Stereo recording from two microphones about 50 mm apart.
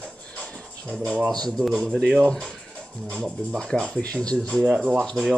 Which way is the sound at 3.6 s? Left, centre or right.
Centre.